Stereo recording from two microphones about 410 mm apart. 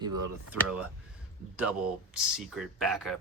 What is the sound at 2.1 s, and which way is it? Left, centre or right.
Speech, centre.